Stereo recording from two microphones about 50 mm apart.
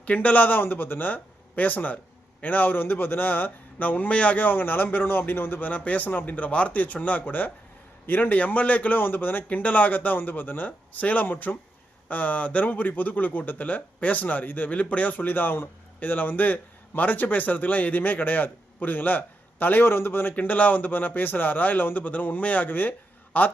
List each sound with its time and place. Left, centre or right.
0.0 s a man's voice: left
20.3 s a man's voice: left